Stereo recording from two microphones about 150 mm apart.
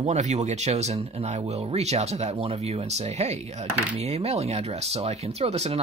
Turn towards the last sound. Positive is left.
turn(degrees=-45)  # may be behind; listen again after turning